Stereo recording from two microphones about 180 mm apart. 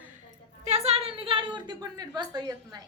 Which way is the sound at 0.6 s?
35° right (ahead or behind).